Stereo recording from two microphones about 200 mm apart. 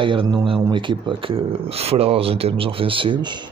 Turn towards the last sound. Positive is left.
turn(degrees=-25)  # may be behind; listen again after turning